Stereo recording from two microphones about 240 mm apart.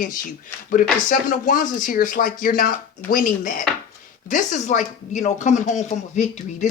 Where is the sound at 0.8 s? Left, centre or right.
Left.